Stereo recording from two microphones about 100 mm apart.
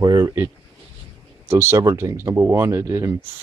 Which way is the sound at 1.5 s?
25° right (ahead or behind).